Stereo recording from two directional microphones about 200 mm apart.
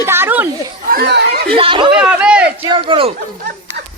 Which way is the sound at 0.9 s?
55° right (ahead or behind).